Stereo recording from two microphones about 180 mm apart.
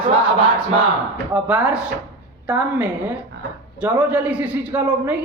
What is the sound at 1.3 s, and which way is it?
Speech, 5° right (ahead or behind).